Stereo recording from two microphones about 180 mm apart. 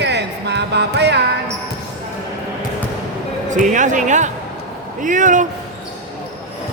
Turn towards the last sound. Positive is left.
turn(degrees=-45)  # may be behind; listen again after turning